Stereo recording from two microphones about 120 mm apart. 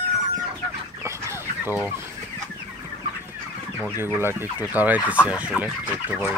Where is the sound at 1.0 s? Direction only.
20° right (ahead or behind).